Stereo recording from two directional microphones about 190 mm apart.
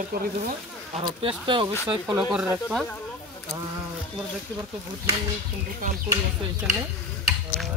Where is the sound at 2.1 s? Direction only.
5° right (ahead or behind).